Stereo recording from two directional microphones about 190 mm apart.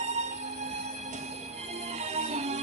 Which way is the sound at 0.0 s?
35° right (ahead or behind).